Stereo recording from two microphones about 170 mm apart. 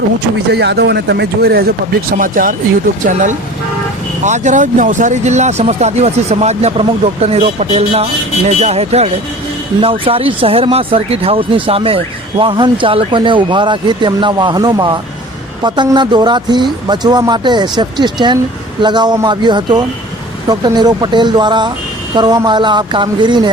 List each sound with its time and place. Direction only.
0.5 s speech: 80° right; by 23.5 s 25° right (ahead or behind)